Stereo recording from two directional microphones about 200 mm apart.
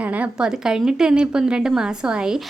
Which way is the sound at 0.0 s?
5° right (ahead or behind).